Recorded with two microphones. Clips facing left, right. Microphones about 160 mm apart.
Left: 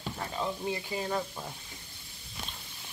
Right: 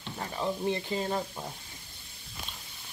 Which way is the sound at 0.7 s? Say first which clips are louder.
Right 3 dB; 15° left (ahead or behind).